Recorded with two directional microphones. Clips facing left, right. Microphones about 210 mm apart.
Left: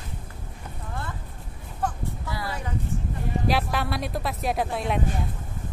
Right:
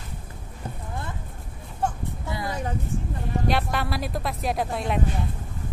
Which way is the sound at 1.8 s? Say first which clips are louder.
Right 1 dB; 20° right (ahead or behind).